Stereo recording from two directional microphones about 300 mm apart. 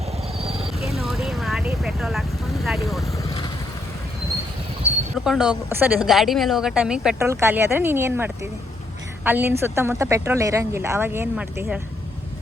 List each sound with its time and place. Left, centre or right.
0.3 s a sound: centre
0.9 s vehicle: centre
5.1 s a woman's voice: centre